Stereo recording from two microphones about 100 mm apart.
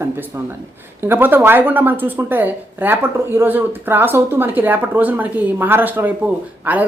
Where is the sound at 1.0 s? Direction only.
20° right (ahead or behind).